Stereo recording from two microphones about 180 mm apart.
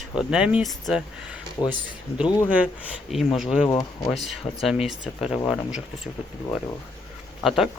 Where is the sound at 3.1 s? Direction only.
Centre (ahead or behind).